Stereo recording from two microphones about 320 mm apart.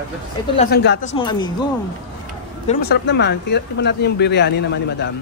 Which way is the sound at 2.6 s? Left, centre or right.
Left.